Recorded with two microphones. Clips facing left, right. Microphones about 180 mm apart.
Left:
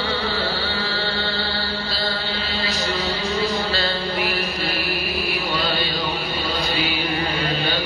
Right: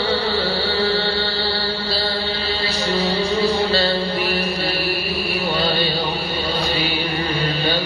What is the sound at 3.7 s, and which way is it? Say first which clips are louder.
Music: right 5 dB; 30° right (ahead or behind).